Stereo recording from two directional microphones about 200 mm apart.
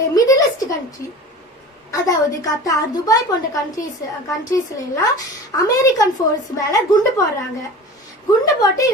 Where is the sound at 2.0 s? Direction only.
15° left (ahead or behind).